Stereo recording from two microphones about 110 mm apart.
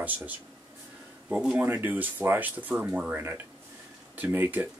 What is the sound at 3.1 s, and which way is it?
Speech, 25° right (ahead or behind).